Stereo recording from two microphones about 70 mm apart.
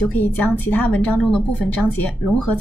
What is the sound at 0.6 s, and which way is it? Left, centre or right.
Speech, left.